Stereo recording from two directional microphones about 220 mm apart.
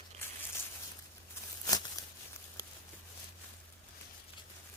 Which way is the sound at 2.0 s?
15° left (ahead or behind).